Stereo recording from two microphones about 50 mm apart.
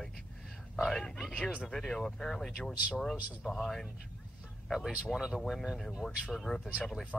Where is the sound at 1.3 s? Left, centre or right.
Left.